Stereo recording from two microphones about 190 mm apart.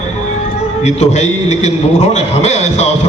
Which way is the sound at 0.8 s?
35° left (ahead or behind).